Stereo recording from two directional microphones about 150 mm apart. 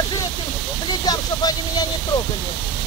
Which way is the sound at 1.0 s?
25° left (ahead or behind).